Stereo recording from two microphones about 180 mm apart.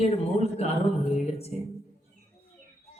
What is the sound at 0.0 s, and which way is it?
Music, 35° left (ahead or behind).